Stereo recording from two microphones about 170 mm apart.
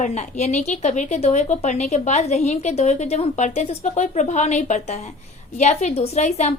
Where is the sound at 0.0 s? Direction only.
40° left (ahead or behind).